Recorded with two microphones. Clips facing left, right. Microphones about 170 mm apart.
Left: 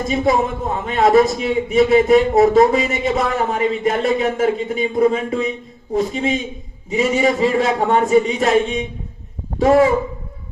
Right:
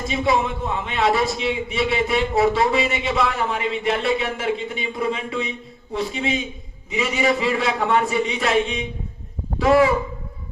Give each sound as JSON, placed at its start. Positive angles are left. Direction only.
{"t": 0.1, "sound": "a man's voice", "side_deg": 45}